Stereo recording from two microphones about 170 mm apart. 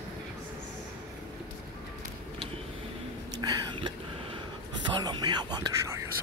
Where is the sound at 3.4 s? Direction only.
25° right (ahead or behind).